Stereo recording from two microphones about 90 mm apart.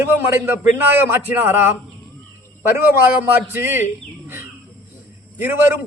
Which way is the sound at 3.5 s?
25° right (ahead or behind).